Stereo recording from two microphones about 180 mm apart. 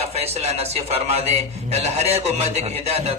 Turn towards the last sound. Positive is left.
turn(degrees=-35)  # may be behind; listen again after turning